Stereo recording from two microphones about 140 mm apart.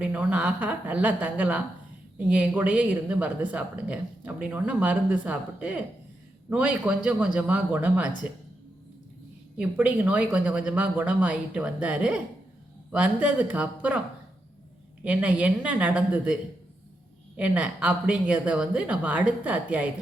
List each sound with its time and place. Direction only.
0.0 s speech: 10° right (ahead or behind)
9.6 s speech: 10° right (ahead or behind)
15.0 s speech: 10° right (ahead or behind)
17.3 s speech: 10° right (ahead or behind)